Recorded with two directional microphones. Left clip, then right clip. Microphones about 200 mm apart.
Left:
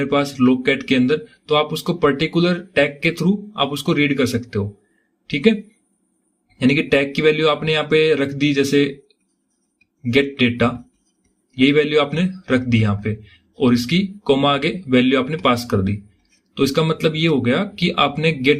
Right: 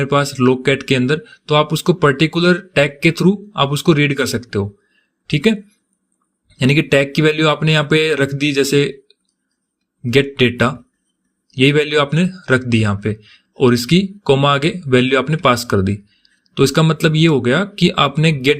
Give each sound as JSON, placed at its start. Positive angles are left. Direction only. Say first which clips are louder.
{"t": 0.0, "sound": "speech", "louder": "right 3 dB", "side_deg": -35}
{"t": 6.6, "sound": "speech", "louder": "right 3 dB", "side_deg": -35}